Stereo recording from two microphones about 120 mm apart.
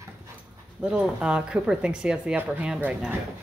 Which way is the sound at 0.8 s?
10° right (ahead or behind).